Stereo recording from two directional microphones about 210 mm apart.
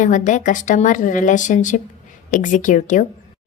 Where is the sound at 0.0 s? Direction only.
35° left (ahead or behind).